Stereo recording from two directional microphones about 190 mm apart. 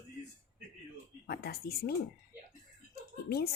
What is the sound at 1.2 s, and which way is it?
Speech, 55° left (ahead or behind).